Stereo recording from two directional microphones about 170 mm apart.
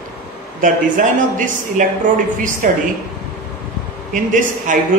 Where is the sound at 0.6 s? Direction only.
50° right (ahead or behind).